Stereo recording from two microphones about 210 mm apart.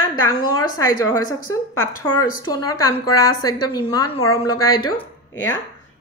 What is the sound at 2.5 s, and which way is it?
A woman's voice, 15° left (ahead or behind).